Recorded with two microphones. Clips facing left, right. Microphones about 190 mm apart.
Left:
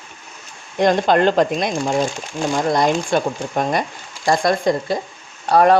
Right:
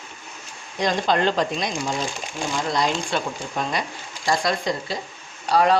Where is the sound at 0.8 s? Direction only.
55° left (ahead or behind).